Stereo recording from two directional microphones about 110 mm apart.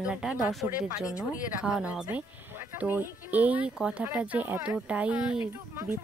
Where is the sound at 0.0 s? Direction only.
10° right (ahead or behind).